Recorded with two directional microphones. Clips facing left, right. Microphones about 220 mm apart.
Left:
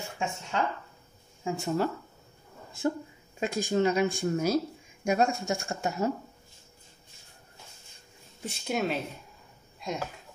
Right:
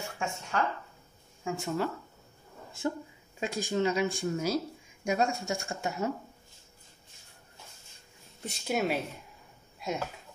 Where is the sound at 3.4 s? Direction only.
50° left (ahead or behind).